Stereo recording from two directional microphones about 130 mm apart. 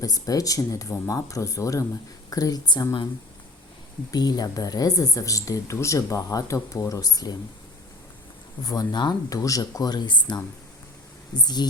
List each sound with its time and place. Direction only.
0.0 s speech: 30° left (ahead or behind)
4.1 s speech: 30° left (ahead or behind)
8.6 s speech: 30° left (ahead or behind)